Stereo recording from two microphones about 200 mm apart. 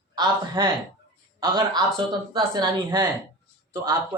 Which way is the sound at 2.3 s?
20° right (ahead or behind).